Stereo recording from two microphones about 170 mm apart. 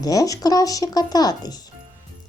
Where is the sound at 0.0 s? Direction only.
20° left (ahead or behind).